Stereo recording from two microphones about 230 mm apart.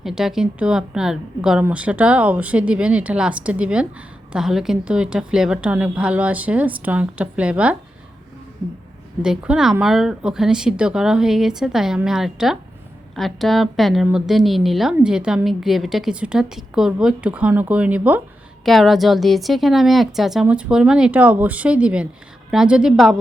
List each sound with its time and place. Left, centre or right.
0.0 s a woman's voice: centre
9.2 s a woman's voice: centre